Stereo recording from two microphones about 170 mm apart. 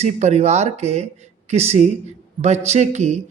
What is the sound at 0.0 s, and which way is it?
A man's voice, 40° right (ahead or behind).